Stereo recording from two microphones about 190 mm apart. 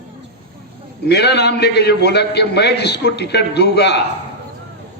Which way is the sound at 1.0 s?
60° left (ahead or behind).